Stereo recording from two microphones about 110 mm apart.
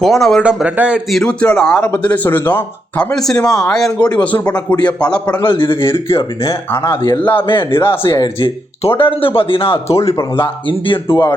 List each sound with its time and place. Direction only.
0.0 s speech: 5° left (ahead or behind)
0.4 s a man's voice: 10° right (ahead or behind)
1.1 s speech: 10° left (ahead or behind)
5.4 s speech: 50° left (ahead or behind)
6.1 s speech: 25° left (ahead or behind)
8.4 s speech: 55° left (ahead or behind)
10.3 s speech: 50° left (ahead or behind)